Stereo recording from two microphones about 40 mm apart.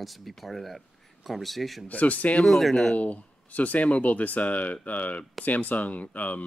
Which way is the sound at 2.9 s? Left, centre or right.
Left.